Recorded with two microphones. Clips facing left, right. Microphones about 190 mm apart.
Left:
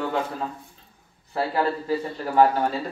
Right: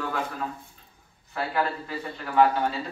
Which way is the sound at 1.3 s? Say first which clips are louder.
Left 4 dB; 30° left (ahead or behind).